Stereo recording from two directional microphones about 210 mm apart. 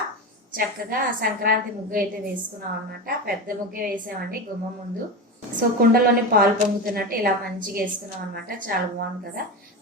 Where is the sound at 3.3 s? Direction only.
45° right (ahead or behind).